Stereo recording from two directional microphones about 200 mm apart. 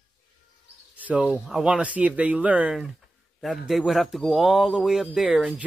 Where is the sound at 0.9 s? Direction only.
5° right (ahead or behind).